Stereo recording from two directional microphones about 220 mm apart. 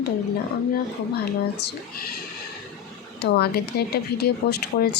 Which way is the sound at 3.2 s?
45° left (ahead or behind).